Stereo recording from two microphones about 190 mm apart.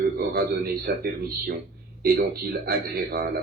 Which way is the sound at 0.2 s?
50° right (ahead or behind).